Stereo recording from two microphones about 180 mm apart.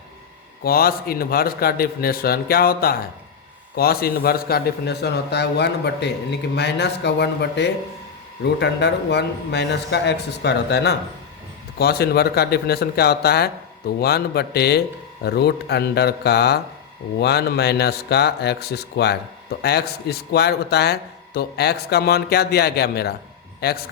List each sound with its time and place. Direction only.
0.6 s a man's voice: 55° left (ahead or behind)